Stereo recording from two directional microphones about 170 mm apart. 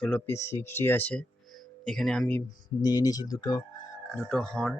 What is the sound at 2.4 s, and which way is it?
Speech, 20° left (ahead or behind).